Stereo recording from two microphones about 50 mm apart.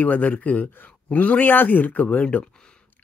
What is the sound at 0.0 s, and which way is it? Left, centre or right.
Speech, left.